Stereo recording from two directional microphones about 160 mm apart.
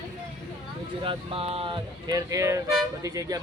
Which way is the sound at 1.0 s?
35° right (ahead or behind).